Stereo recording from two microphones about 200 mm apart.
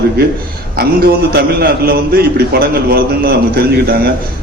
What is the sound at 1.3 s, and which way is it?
A man's voice, 50° right (ahead or behind).